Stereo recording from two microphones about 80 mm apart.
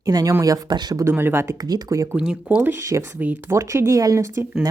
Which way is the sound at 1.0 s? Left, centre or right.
Right.